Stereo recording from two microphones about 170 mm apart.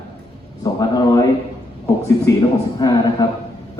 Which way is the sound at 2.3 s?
20° left (ahead or behind).